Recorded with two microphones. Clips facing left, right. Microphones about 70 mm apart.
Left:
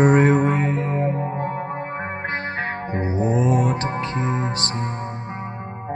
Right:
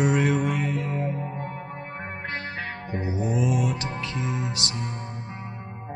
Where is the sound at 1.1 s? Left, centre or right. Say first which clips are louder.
Left 7 dB; left.